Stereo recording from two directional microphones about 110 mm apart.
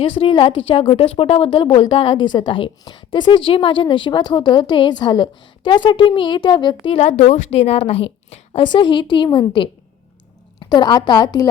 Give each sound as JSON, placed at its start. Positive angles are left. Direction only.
{"t": 0.0, "sound": "a woman's voice", "side_deg": 55}
{"t": 6.8, "sound": "a woman's voice", "side_deg": 75}